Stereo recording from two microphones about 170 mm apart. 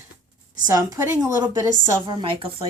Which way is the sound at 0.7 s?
20° right (ahead or behind).